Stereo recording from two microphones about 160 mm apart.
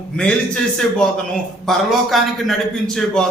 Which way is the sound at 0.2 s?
5° left (ahead or behind).